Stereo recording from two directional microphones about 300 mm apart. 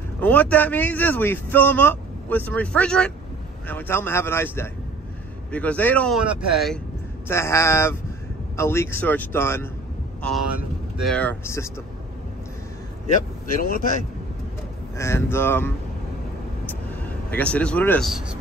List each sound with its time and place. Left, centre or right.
0.2 s speech: centre
11.0 s speech: centre
13.1 s speech: left
15.0 s speech: centre
16.6 s vehicle: centre